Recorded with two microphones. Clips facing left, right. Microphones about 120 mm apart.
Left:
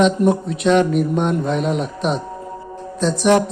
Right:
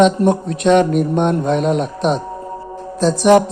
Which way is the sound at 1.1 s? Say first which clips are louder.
Right 3 dB; 30° right (ahead or behind).